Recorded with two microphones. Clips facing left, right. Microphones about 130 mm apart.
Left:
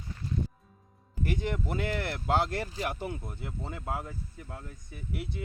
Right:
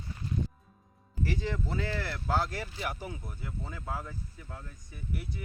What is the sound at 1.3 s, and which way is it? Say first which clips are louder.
Speech: left 2 dB; 15° left (ahead or behind).